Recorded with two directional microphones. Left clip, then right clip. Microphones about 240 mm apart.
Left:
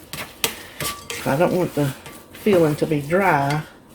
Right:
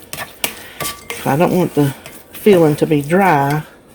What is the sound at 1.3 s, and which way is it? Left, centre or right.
Speech, right.